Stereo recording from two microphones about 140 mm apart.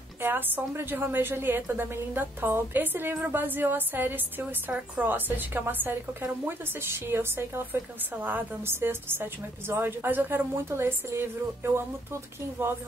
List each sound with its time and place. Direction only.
0.2 s a woman's voice: 15° right (ahead or behind)